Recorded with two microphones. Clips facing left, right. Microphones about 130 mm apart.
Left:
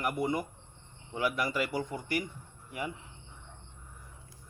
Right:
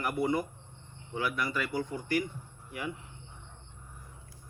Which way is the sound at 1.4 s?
25° left (ahead or behind).